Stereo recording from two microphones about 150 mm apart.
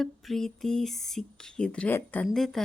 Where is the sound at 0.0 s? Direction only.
Centre (ahead or behind).